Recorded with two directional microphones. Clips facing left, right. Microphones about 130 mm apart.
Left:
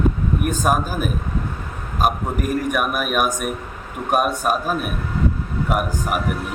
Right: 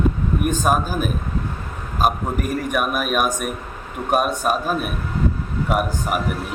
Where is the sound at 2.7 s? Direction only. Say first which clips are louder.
Even; 5° left (ahead or behind).